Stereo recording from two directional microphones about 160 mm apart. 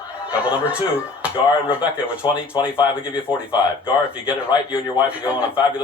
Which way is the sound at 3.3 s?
30° left (ahead or behind).